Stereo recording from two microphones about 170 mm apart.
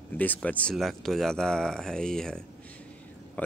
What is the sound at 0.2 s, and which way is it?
Speech, 10° left (ahead or behind).